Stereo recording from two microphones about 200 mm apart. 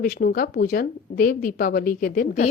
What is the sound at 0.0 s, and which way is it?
A woman's voice, 45° left (ahead or behind).